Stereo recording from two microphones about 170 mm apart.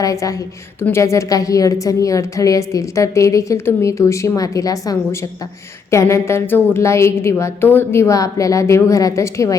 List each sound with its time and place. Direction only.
0.0 s a woman's voice: 20° left (ahead or behind)